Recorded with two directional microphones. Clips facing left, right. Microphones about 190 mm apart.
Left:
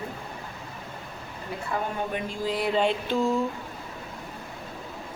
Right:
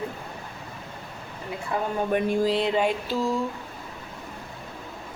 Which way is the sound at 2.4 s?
25° right (ahead or behind).